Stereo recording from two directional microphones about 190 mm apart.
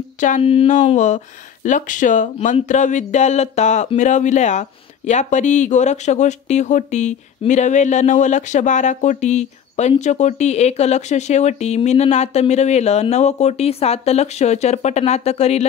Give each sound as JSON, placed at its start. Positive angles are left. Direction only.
{"t": 0.2, "sound": "speech", "side_deg": 35}